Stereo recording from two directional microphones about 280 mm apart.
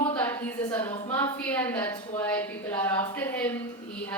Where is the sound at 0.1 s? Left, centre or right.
Centre.